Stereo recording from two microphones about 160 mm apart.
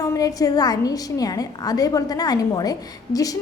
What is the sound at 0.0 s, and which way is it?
A woman's voice, 20° left (ahead or behind).